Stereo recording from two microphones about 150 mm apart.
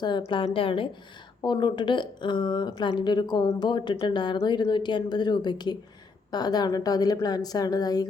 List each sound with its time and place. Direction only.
0.3 s a woman's voice: 35° left (ahead or behind)